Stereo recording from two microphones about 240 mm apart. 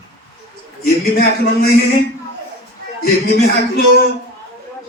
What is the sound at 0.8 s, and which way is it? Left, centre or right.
Speech, left.